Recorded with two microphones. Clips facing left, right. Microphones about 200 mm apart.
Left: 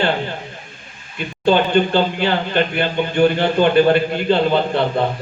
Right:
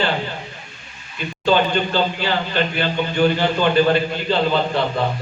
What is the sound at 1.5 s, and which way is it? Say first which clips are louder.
Speech: left 3 dB; 55° left (ahead or behind).